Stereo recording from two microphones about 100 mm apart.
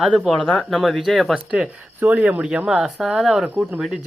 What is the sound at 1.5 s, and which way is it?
Speech, 15° right (ahead or behind).